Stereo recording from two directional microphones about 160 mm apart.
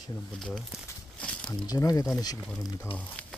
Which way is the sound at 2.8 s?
10° left (ahead or behind).